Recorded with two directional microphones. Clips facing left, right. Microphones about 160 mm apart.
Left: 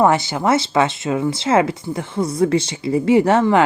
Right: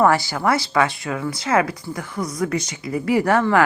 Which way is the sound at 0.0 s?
20° left (ahead or behind).